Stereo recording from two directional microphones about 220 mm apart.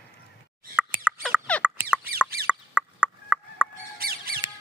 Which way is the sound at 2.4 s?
5° right (ahead or behind).